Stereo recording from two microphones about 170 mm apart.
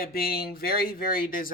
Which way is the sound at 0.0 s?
60° left (ahead or behind).